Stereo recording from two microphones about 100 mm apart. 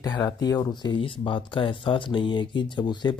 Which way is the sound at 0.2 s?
40° left (ahead or behind).